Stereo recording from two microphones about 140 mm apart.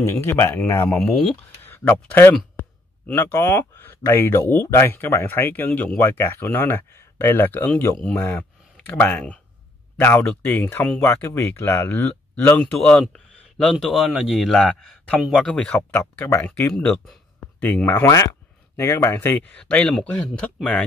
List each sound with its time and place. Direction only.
0.0 s speech: 20° left (ahead or behind)
0.8 s speech: 5° left (ahead or behind)
1.3 s speech: 15° left (ahead or behind)
16.7 s speech: centre (ahead or behind)